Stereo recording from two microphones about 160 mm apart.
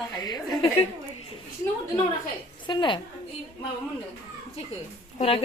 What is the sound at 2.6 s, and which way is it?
Speech, 30° left (ahead or behind).